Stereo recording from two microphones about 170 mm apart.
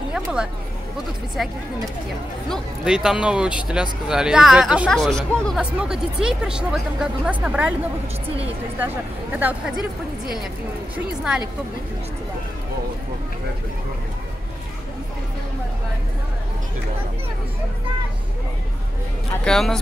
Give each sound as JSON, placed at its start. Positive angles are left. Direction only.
{"t": 0.1, "sound": "speech", "side_deg": -5}
{"t": 2.5, "sound": "speech", "side_deg": -5}
{"t": 8.7, "sound": "a woman's voice", "side_deg": -10}
{"t": 19.4, "sound": "speech", "side_deg": 5}